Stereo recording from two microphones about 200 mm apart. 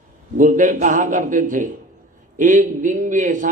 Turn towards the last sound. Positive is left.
turn(degrees=-40)  # may be behind; listen again after turning